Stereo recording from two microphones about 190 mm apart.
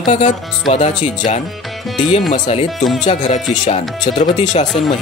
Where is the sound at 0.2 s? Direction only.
40° left (ahead or behind).